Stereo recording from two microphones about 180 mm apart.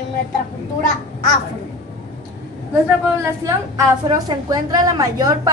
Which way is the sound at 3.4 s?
20° right (ahead or behind).